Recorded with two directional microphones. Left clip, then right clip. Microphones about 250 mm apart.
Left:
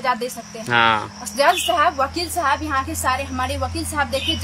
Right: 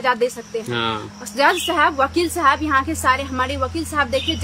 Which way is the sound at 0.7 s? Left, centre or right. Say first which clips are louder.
Left 8 dB; centre.